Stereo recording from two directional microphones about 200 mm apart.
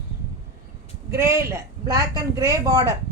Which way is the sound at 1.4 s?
15° right (ahead or behind).